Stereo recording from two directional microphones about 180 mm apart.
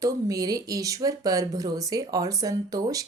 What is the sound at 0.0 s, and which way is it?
Speech, 20° right (ahead or behind).